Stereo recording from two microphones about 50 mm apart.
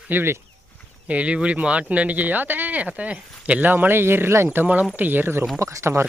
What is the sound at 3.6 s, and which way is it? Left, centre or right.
Speech, right.